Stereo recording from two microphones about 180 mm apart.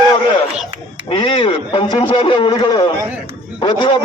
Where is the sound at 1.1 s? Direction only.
30° left (ahead or behind).